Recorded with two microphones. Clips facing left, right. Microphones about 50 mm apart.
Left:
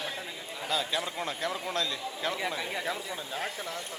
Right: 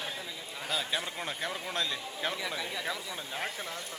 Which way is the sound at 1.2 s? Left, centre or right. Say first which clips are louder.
Left 3 dB; centre.